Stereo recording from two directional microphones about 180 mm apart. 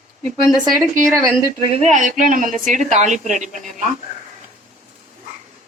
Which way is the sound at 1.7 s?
40° right (ahead or behind).